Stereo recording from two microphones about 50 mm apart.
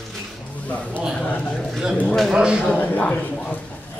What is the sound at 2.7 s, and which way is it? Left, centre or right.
Speech, left.